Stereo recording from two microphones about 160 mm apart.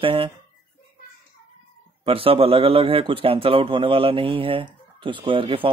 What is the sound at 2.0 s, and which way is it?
Speech, 35° right (ahead or behind).